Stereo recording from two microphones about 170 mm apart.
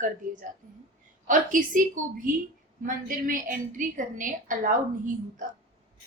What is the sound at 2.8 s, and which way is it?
A woman's voice, 55° right (ahead or behind).